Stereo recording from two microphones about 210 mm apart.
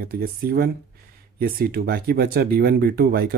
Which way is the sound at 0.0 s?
45° right (ahead or behind).